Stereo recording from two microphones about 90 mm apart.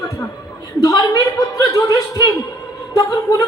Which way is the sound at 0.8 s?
40° left (ahead or behind).